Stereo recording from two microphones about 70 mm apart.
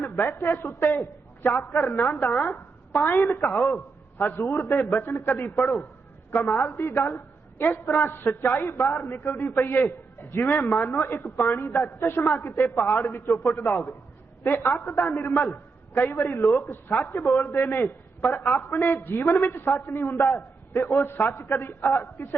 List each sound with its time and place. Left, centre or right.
0.2 s speech: left
2.9 s speech: left
3.3 s a man's voice: left
4.4 s speech: left
4.9 s speech: left
8.2 s speech: left
8.4 s speech: left
9.6 s speech: left
12.7 s speech: left
13.0 s a man's voice: left
19.9 s speech: left